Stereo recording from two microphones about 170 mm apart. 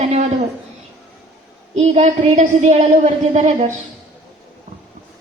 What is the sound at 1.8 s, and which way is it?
A woman's voice, 40° right (ahead or behind).